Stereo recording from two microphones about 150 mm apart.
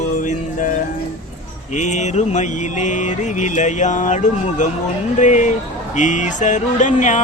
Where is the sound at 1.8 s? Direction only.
50° left (ahead or behind).